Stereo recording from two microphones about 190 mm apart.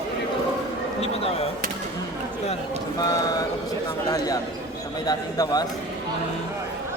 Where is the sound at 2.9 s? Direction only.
20° left (ahead or behind).